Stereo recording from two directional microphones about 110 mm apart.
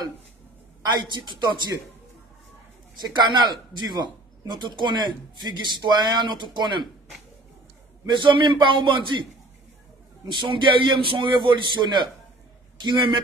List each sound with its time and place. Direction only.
1.0 s a man's voice: 45° right (ahead or behind)
3.2 s a man's voice: 40° right (ahead or behind)
8.1 s a man's voice: 45° right (ahead or behind)
10.3 s a man's voice: 45° right (ahead or behind)